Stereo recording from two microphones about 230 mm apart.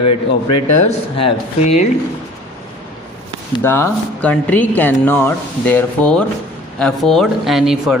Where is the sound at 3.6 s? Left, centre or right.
Centre.